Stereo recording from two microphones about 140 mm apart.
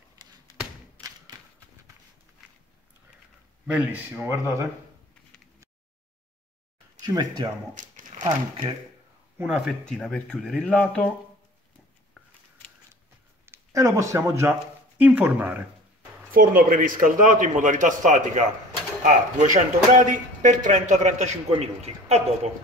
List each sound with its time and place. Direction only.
0.2 s a sound: 25° right (ahead or behind)
1.0 s thump: 10° left (ahead or behind)
3.6 s speech: 10° right (ahead or behind)
7.0 s speech: 30° right (ahead or behind)
7.7 s crumpling: 65° right (ahead or behind)
9.4 s speech: 5° right (ahead or behind)
9.8 s speech: 5° left (ahead or behind)
13.5 s speech: 20° right (ahead or behind)
16.3 s speech: 80° right; by 22.5 s 50° right (ahead or behind)